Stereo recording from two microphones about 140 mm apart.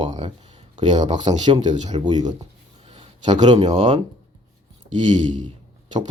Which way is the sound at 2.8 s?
35° right (ahead or behind).